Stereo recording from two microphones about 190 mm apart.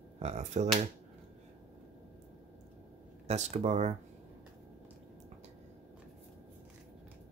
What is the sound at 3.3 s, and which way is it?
Speech, 35° right (ahead or behind).